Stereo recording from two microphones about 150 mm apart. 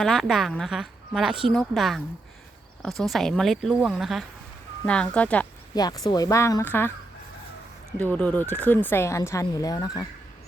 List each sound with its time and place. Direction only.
0.0 s a woman's voice: centre (ahead or behind)
5.7 s speech: 25° left (ahead or behind)
7.9 s speech: 10° left (ahead or behind); by 10.1 s 25° left (ahead or behind)